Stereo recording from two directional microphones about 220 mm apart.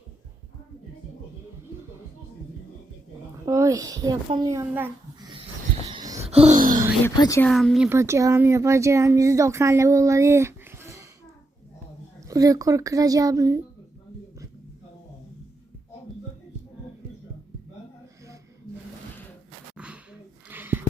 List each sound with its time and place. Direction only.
3.4 s a child's voice: 15° right (ahead or behind)
5.9 s a sound: 20° right (ahead or behind); by 6.7 s 35° right (ahead or behind)
7.0 s speech: 15° left (ahead or behind)
7.5 s speech: centre (ahead or behind)
12.3 s speech: 15° right (ahead or behind)
19.7 s a sound: 5° right (ahead or behind)